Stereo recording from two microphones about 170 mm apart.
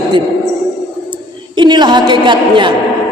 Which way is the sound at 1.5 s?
25° right (ahead or behind).